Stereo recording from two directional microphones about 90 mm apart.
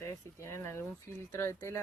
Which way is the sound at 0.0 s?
30° left (ahead or behind).